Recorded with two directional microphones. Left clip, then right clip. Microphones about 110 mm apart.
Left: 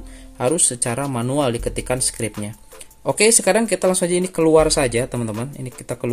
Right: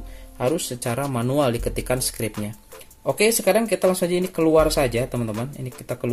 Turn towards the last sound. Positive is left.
turn(degrees=35)  # may be behind; listen again after turning